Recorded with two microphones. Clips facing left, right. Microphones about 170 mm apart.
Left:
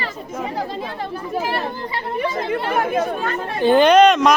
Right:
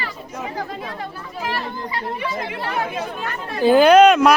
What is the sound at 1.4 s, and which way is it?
Speech, 30° left (ahead or behind).